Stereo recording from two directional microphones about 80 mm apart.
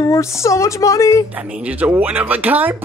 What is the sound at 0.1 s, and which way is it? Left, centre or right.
Speech, left.